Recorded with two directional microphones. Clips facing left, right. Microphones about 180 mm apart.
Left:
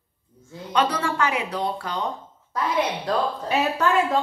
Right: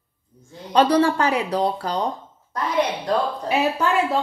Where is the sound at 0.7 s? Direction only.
35° right (ahead or behind).